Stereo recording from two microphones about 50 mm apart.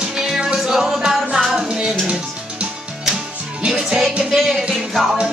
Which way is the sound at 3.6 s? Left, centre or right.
Centre.